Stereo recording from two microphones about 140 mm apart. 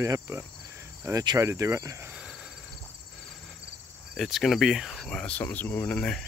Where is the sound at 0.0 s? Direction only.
20° right (ahead or behind).